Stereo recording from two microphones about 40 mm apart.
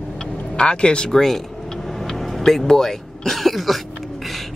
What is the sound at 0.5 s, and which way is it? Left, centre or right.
Speech, left.